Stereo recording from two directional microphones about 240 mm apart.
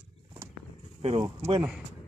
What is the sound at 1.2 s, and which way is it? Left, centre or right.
Speech, centre.